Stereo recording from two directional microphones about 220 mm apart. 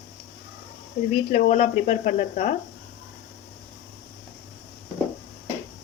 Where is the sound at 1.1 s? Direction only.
35° left (ahead or behind).